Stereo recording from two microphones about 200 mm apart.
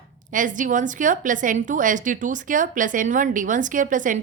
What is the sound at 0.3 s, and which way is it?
A woman's voice, 40° right (ahead or behind).